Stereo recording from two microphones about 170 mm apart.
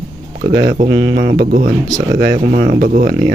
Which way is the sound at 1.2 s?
65° right (ahead or behind).